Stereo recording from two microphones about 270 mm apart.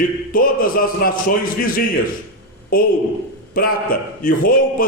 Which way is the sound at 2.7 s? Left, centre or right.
Left.